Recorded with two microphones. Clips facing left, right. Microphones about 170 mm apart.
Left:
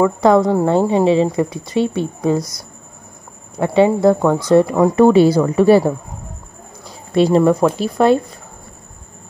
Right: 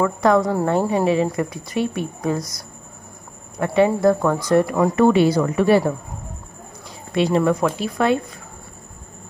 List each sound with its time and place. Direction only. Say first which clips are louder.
0.0 s speech: left 4 dB; 25° left (ahead or behind)
7.2 s speech: left 5 dB; 35° left (ahead or behind)